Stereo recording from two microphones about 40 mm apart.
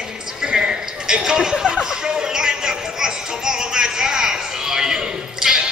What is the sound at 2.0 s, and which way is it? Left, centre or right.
Music, centre.